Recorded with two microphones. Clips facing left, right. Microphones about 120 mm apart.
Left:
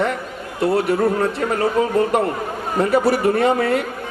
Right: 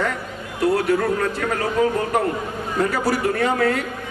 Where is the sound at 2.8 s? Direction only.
25° left (ahead or behind).